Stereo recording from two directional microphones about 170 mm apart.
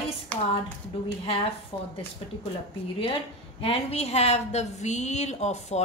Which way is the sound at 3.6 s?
35° left (ahead or behind).